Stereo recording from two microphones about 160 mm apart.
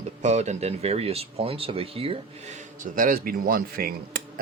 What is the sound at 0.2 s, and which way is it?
Speech, 45° right (ahead or behind).